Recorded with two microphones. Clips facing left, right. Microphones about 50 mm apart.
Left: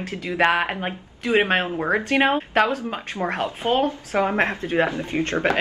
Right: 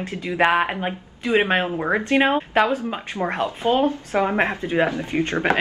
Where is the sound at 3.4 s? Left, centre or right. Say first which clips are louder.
Right 2 dB; left.